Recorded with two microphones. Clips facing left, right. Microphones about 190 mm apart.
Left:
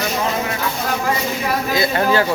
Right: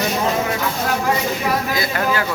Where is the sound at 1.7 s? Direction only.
25° left (ahead or behind).